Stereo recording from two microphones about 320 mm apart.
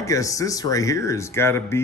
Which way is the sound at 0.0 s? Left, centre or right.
Centre.